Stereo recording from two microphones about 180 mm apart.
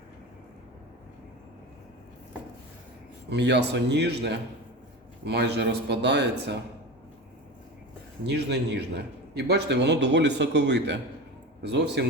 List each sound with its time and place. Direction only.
3.2 s a man's voice: 70° right (ahead or behind)
8.3 s a man's voice: 65° right (ahead or behind)